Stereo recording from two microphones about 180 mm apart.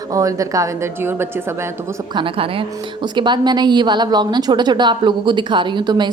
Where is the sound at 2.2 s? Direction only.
30° right (ahead or behind).